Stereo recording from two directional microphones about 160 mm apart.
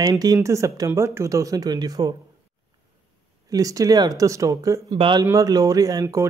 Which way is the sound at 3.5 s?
20° right (ahead or behind).